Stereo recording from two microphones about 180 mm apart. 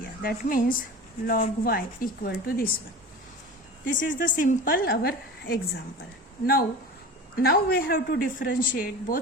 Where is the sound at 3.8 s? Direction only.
45° left (ahead or behind).